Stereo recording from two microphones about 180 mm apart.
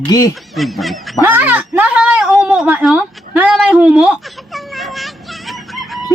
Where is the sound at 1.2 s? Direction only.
10° right (ahead or behind).